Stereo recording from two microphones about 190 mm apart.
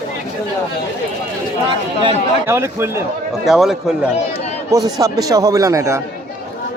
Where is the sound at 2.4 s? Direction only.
10° right (ahead or behind).